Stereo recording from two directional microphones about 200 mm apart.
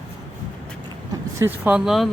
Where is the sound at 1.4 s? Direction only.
10° right (ahead or behind).